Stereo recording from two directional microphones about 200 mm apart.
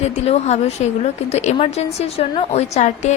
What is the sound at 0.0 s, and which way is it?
A woman's voice, 35° left (ahead or behind).